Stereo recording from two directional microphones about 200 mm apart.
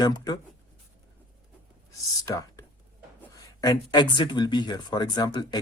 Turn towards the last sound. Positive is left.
turn(degrees=20)  # may be behind; listen again after turning